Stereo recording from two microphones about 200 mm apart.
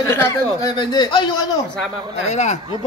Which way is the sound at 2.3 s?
35° left (ahead or behind).